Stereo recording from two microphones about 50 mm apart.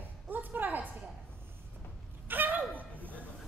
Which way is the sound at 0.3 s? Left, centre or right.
Right.